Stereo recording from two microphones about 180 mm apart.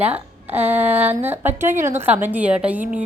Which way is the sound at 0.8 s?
35° right (ahead or behind).